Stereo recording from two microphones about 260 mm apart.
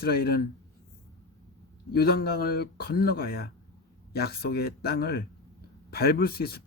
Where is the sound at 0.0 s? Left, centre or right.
Left.